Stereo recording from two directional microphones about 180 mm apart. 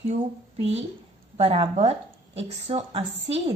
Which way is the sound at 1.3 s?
35° right (ahead or behind).